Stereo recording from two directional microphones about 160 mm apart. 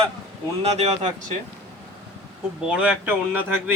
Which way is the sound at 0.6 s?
45° right (ahead or behind).